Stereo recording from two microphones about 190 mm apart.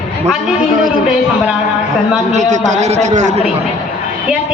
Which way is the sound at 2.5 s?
40° right (ahead or behind).